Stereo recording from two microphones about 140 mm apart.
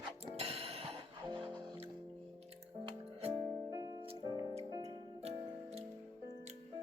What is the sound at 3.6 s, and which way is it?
Music, 25° right (ahead or behind).